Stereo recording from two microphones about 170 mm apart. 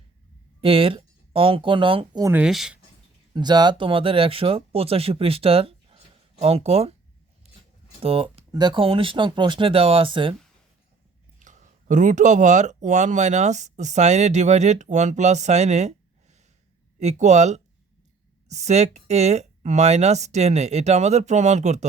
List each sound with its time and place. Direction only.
0.6 s speech: 35° right (ahead or behind)
2.2 s speech: 10° right (ahead or behind)
3.3 s speech: 25° right (ahead or behind)
7.4 s a sound: 35° right (ahead or behind)
8.0 s speech: 35° right (ahead or behind)
11.3 s speech: 50° right (ahead or behind)
17.0 s speech: 40° right (ahead or behind)